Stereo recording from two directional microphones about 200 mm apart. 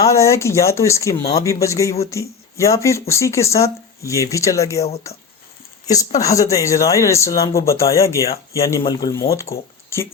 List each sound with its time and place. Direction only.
0.0 s speech: 15° left (ahead or behind)
6.1 s speech: 15° left (ahead or behind)